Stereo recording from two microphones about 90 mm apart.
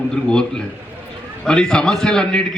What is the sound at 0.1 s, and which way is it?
A man's voice, 10° left (ahead or behind).